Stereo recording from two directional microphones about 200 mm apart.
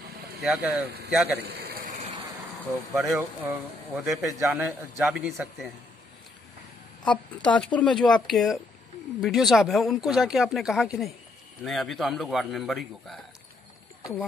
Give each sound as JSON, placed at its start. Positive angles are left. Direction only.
{"t": 0.4, "sound": "speech", "side_deg": 0}
{"t": 1.4, "sound": "speech", "side_deg": -55}
{"t": 2.9, "sound": "a man's voice", "side_deg": 0}
{"t": 7.1, "sound": "speech", "side_deg": 5}